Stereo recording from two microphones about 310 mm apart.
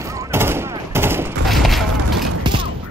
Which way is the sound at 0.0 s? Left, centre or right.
Centre.